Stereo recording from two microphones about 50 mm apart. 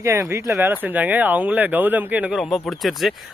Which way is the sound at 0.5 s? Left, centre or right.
Right.